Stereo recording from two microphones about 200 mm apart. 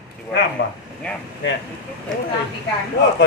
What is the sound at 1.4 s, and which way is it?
Speech, 70° left (ahead or behind).